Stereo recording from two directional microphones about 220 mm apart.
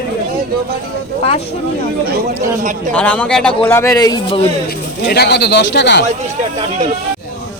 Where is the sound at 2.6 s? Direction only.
35° right (ahead or behind).